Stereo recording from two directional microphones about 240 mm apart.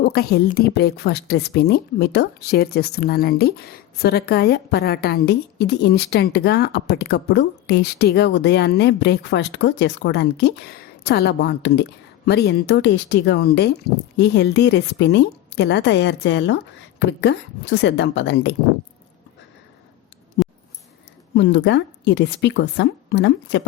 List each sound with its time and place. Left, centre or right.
0.0 s speech: left
20.4 s a sound: left
21.3 s speech: left